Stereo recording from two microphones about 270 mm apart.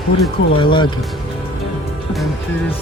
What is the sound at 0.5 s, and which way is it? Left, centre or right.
Speech, centre.